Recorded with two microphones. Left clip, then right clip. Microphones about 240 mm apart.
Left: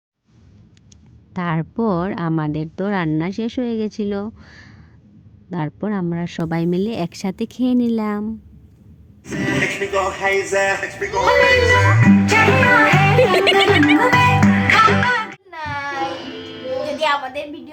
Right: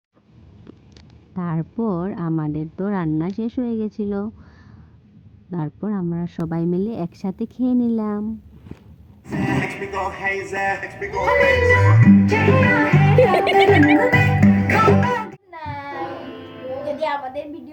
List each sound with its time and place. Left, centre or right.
1.4 s a woman's voice: left
5.5 s a woman's voice: centre
6.4 s speech: left
9.3 s speech: right
13.3 s music: centre
13.7 s music: right
15.4 s child singing: centre
17.0 s a woman's voice: centre